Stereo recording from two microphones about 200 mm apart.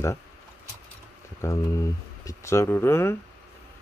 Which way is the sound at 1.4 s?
15° left (ahead or behind).